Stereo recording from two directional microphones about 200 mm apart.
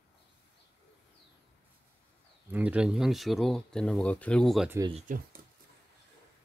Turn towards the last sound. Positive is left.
turn(degrees=-30)  # may be behind; listen again after turning